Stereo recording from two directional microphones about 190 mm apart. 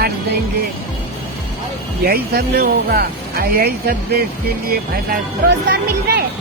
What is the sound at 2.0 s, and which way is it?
Speech, 55° right (ahead or behind).